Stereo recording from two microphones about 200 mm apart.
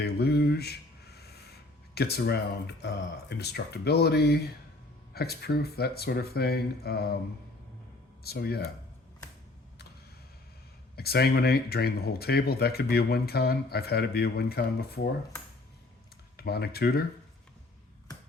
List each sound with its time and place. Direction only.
0.0 s a sound: 55° left (ahead or behind)
2.0 s speech: 55° left (ahead or behind)
8.2 s speech: 50° left (ahead or behind)
10.9 s speech: 50° left (ahead or behind)
16.4 s speech: 50° left (ahead or behind)